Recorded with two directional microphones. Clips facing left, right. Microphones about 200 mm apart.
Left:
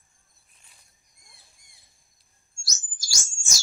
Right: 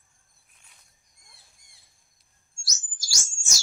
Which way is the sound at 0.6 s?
Centre (ahead or behind).